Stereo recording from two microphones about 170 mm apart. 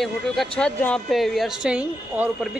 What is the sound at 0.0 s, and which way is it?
A woman's voice, 5° left (ahead or behind).